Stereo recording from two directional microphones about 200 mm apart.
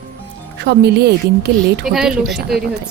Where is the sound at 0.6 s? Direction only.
60° right (ahead or behind).